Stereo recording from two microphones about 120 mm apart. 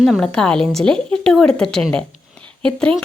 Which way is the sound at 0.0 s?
5° left (ahead or behind).